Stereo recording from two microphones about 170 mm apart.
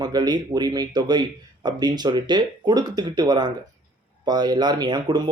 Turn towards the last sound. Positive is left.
turn(degrees=-25)  # may be behind; listen again after turning